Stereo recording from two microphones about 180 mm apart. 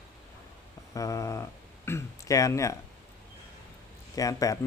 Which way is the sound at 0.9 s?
20° left (ahead or behind).